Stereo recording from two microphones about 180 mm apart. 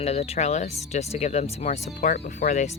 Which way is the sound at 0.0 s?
35° left (ahead or behind).